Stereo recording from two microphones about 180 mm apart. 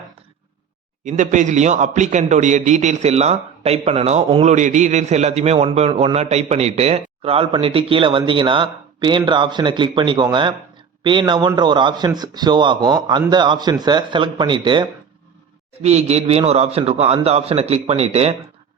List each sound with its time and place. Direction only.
1.0 s a man's voice: 45° right (ahead or behind); by 14.8 s 25° right (ahead or behind)
15.8 s a man's voice: 35° right (ahead or behind)